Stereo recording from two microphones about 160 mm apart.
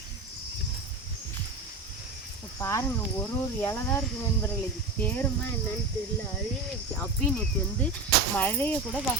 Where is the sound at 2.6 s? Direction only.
20° left (ahead or behind).